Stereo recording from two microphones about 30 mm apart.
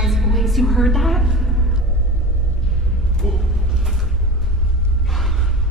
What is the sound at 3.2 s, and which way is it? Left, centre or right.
Speech, centre.